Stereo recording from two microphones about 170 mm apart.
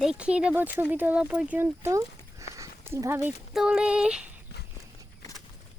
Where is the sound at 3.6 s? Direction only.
5° right (ahead or behind).